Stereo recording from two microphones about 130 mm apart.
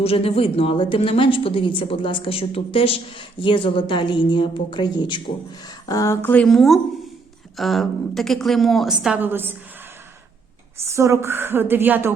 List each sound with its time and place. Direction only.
0.0 s a woman's voice: 50° left (ahead or behind); by 6.3 s 25° left (ahead or behind)
6.3 s a woman's voice: 5° left (ahead or behind); by 9.6 s 15° right (ahead or behind)
10.8 s a woman's voice: 20° right (ahead or behind)